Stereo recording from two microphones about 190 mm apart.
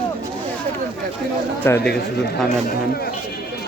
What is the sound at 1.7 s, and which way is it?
Speech, 15° left (ahead or behind).